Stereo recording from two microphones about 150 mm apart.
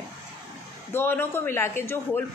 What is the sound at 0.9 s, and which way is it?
A woman's voice, 15° left (ahead or behind).